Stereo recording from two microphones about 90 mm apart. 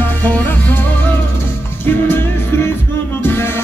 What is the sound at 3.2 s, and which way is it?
Music, 25° left (ahead or behind).